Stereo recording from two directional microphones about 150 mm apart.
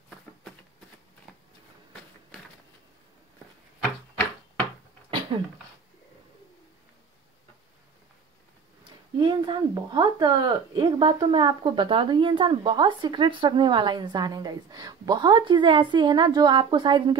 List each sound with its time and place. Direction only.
8.8 s speech: 30° right (ahead or behind)